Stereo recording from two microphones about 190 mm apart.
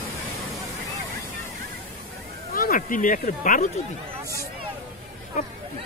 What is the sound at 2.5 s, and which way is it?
Speech, 50° left (ahead or behind).